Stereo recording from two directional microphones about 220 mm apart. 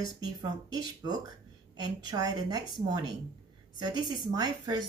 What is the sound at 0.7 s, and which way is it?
Speech, 20° right (ahead or behind).